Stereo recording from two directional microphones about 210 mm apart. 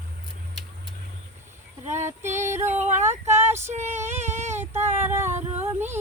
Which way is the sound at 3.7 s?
35° right (ahead or behind).